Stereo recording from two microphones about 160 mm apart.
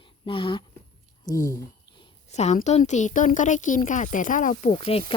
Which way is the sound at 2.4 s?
45° left (ahead or behind).